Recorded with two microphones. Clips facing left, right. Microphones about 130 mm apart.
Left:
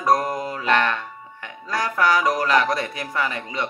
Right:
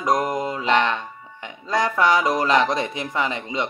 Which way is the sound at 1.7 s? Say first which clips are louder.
Right 2 dB; 25° right (ahead or behind).